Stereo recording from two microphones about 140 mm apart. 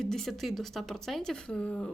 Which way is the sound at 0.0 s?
5° left (ahead or behind).